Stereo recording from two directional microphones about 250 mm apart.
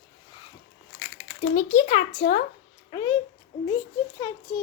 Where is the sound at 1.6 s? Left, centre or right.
Left.